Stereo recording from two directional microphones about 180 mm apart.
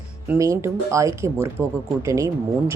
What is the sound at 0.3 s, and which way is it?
Speech, 15° right (ahead or behind).